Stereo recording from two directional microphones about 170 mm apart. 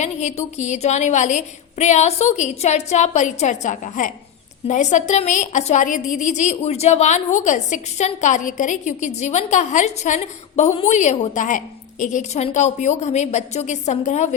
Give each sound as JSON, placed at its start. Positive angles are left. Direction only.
{"t": 0.0, "sound": "a woman's voice", "side_deg": 40}